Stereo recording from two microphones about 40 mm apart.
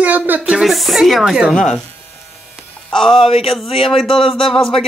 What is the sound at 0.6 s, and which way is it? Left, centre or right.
Speech, centre.